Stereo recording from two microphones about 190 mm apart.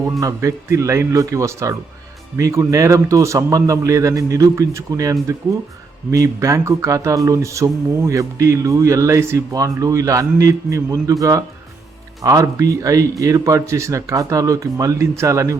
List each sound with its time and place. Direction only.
0.2 s speech: 15° right (ahead or behind)